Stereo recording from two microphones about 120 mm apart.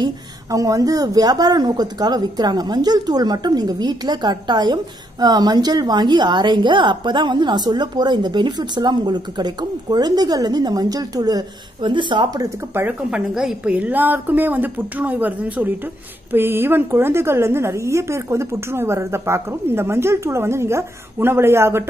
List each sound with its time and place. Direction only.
0.0 s a woman's voice: 30° right (ahead or behind)
12.7 s a woman's voice: 15° right (ahead or behind)